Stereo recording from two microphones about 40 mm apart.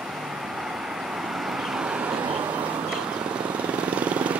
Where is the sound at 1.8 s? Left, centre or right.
Right.